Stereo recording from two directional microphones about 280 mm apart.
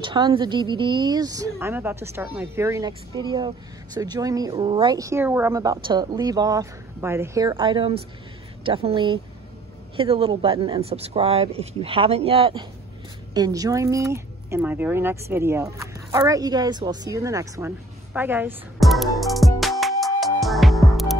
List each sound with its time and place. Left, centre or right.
0.0 s speech: centre
20.2 s music: centre